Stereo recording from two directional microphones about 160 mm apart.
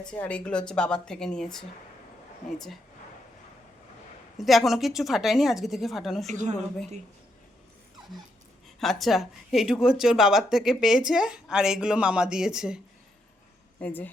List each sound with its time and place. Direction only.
0.0 s speech: 5° left (ahead or behind)
4.4 s speech: centre (ahead or behind)
6.2 s a woman's voice: 50° right (ahead or behind)
8.8 s speech: centre (ahead or behind)
13.7 s speech: 10° left (ahead or behind)